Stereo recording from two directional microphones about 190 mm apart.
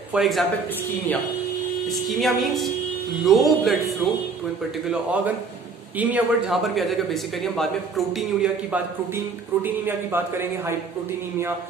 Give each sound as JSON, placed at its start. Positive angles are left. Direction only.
{"t": 0.1, "sound": "speech", "side_deg": 0}
{"t": 2.0, "sound": "speech", "side_deg": 0}